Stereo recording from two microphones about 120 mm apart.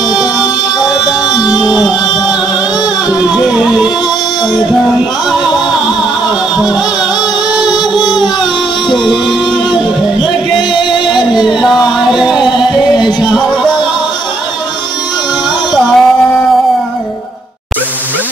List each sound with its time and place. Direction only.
0.1 s music: 5° right (ahead or behind)
3.1 s music: 10° right (ahead or behind)
9.0 s music: 5° right (ahead or behind)
10.2 s music: 40° left (ahead or behind)
11.4 s music: centre (ahead or behind)
15.7 s music: centre (ahead or behind)